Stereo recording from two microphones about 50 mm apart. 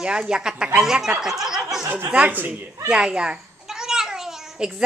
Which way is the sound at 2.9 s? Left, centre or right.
Centre.